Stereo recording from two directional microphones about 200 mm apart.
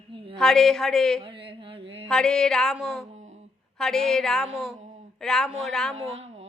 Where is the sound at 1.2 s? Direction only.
25° right (ahead or behind).